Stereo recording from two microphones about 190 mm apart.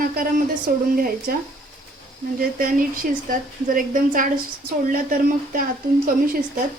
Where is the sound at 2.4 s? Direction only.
50° right (ahead or behind).